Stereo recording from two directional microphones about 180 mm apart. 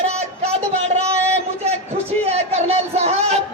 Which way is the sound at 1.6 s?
35° right (ahead or behind).